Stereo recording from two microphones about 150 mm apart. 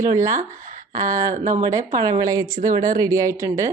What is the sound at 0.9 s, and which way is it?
Speech, 20° right (ahead or behind).